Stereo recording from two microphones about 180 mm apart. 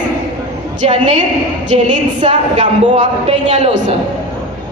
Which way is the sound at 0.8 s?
40° right (ahead or behind).